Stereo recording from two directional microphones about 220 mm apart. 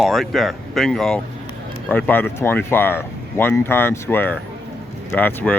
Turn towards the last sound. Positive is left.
turn(degrees=10)  # may be behind; listen again after turning